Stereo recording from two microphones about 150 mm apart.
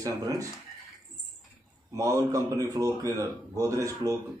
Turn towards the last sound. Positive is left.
turn(degrees=-20)  # may be behind; listen again after turning